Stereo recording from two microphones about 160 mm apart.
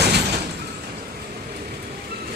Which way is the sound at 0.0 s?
90° right.